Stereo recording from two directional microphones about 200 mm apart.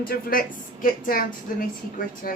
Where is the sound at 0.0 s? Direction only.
45° left (ahead or behind).